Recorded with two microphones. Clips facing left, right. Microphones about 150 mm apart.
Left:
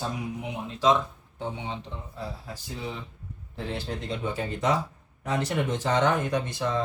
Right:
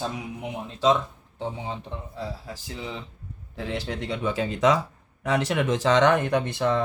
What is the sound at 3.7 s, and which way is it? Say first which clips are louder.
Speech: right 3 dB; 90° right.